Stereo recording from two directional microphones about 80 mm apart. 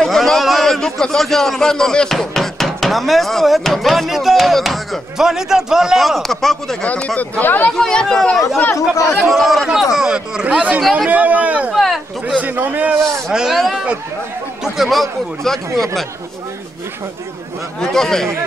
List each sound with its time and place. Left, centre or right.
0.0 s a man's voice: centre
6.8 s speech: centre
7.7 s speech: centre
8.7 s speech: left
9.2 s a man's voice: centre
10.8 s a man's voice: centre
11.1 s speech: centre
11.7 s a sound: centre
12.3 s speech: centre
13.3 s a man's voice: centre
17.7 s a man's voice: centre